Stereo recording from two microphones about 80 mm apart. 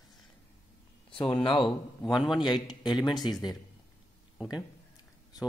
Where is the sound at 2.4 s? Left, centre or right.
Left.